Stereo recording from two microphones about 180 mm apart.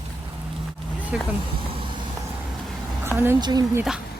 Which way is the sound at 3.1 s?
15° right (ahead or behind).